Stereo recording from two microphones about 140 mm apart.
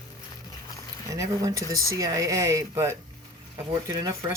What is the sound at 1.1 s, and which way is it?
Speech, 25° right (ahead or behind).